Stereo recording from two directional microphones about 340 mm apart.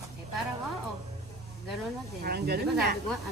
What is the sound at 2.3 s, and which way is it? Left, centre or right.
Speech, right.